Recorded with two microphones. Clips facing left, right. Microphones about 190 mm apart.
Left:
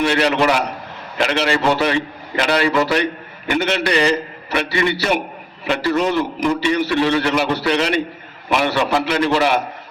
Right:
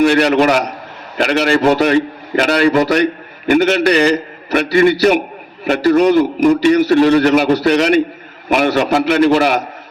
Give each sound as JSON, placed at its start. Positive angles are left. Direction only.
{"t": 0.0, "sound": "a man's voice", "side_deg": -45}